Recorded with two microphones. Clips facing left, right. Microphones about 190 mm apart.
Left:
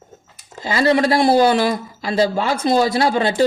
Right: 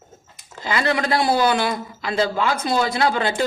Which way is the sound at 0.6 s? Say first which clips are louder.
Left 6 dB; 25° left (ahead or behind).